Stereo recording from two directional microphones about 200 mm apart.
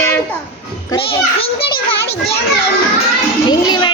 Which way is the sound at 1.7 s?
55° left (ahead or behind).